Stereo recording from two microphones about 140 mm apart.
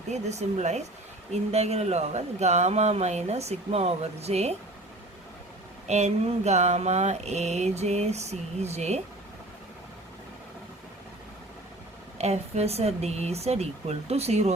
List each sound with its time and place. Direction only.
0.1 s speech: 55° right (ahead or behind)
5.9 s speech: 55° right (ahead or behind)
12.1 s speech: 50° right (ahead or behind)